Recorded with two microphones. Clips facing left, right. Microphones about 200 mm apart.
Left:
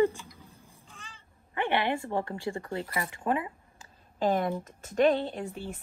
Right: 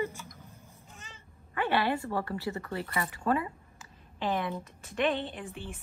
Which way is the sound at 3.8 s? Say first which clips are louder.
Left 6 dB; 45° left (ahead or behind).